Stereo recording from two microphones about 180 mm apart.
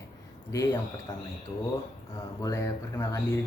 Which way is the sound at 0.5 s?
20° left (ahead or behind).